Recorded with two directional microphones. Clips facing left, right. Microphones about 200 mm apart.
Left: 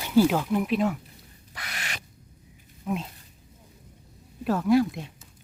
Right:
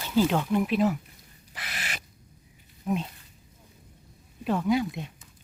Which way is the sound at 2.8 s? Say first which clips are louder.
Right 1 dB; centre (ahead or behind).